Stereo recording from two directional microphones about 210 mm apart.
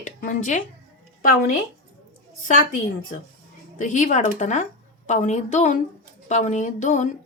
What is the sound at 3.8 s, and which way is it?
Speech, 35° left (ahead or behind).